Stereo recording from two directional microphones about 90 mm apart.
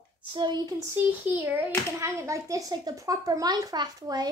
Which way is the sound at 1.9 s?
35° right (ahead or behind).